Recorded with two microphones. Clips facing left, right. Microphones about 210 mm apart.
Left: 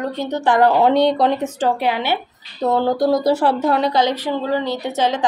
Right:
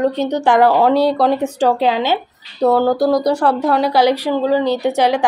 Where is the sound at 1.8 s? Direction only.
20° right (ahead or behind).